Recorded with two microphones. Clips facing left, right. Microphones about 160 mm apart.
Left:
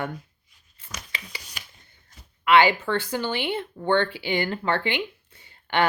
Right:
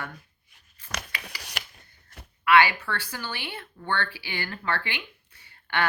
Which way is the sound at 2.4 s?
25° left (ahead or behind).